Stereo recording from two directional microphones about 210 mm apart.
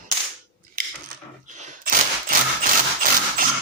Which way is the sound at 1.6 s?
40° right (ahead or behind).